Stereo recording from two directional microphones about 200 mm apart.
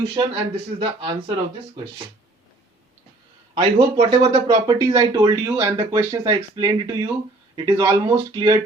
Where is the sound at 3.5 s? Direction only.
25° right (ahead or behind).